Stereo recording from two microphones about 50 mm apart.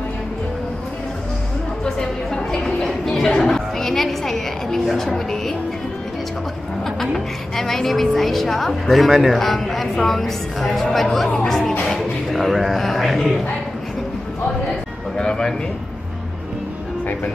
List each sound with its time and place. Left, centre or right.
2.0 s music: centre
3.3 s a woman's voice: centre
7.0 s a woman's voice: centre
15.1 s a sound: centre